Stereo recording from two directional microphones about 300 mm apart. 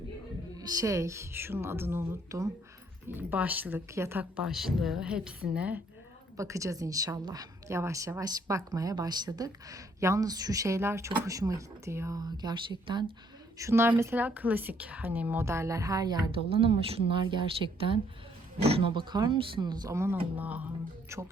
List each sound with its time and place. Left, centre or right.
0.5 s a woman's voice: centre
18.6 s a woman's voice: centre